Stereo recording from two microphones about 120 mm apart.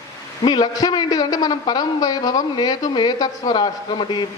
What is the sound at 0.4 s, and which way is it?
A man's voice, 35° left (ahead or behind).